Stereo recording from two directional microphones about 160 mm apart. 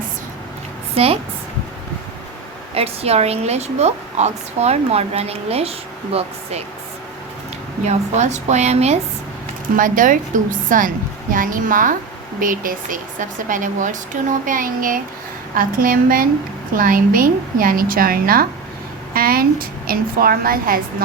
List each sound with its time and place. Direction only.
0.9 s a woman's voice: 35° right (ahead or behind)
2.7 s a woman's voice: 40° right (ahead or behind)
7.9 s a woman's voice: 45° right (ahead or behind)
9.7 s speech: 55° right (ahead or behind)